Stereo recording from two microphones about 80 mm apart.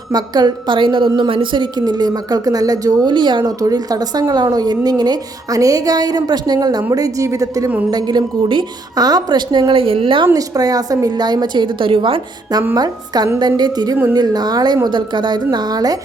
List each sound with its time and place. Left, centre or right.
0.1 s a woman's voice: right
1.8 s speech: right
3.1 s speech: right
3.6 s speech: right
6.9 s speech: right
7.9 s speech: right
10.3 s speech: right
12.7 s speech: right